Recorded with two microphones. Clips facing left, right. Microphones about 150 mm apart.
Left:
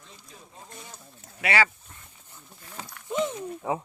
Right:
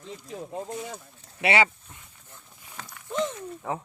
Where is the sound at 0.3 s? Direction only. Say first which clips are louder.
Right 15 dB; 75° right (ahead or behind).